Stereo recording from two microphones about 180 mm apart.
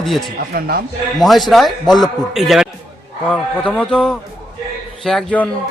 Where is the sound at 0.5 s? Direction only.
55° right (ahead or behind).